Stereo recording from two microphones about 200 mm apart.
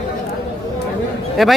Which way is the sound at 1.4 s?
Centre (ahead or behind).